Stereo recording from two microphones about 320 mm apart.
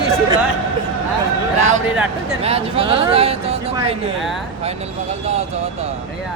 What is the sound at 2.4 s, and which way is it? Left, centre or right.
Speech, centre.